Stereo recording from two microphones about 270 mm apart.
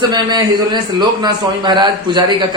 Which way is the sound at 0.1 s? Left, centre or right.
Centre.